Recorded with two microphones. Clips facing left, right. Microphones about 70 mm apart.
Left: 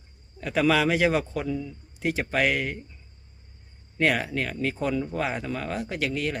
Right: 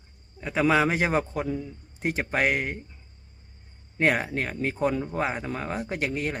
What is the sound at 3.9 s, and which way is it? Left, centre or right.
Speech, right.